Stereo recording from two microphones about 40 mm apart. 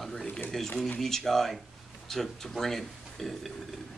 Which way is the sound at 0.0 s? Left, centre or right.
Centre.